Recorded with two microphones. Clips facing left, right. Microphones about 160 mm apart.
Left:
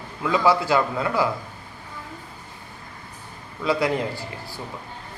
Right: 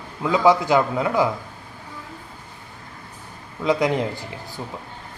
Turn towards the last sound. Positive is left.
turn(degrees=-15)  # may be behind; listen again after turning